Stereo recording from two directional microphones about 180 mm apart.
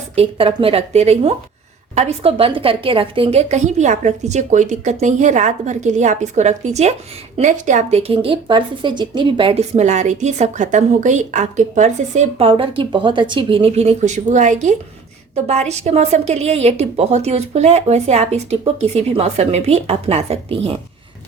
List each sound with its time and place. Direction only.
0.2 s speech: 30° right (ahead or behind)